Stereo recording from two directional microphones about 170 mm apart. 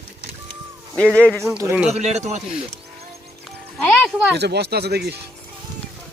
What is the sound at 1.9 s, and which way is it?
Speech, 40° right (ahead or behind).